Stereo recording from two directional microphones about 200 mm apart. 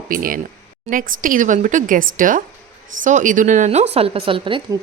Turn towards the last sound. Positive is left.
turn(degrees=-25)  # may be behind; listen again after turning